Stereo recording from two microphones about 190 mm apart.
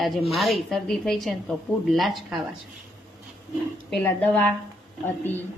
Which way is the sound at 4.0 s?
5° left (ahead or behind).